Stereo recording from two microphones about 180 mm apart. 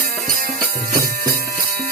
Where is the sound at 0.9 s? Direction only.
55° right (ahead or behind).